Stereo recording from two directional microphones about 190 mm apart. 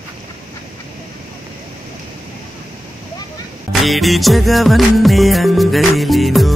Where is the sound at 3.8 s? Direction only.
Centre (ahead or behind).